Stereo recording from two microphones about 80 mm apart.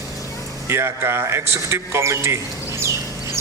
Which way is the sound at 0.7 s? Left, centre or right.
Right.